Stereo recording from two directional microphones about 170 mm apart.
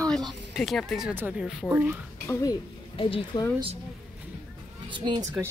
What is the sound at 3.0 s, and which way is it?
Speech, 30° left (ahead or behind).